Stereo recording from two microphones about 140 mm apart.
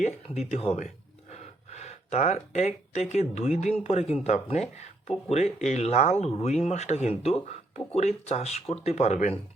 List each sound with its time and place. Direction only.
0.0 s speech: 55° left (ahead or behind)